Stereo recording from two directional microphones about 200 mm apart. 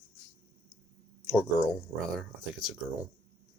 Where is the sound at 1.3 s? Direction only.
15° left (ahead or behind).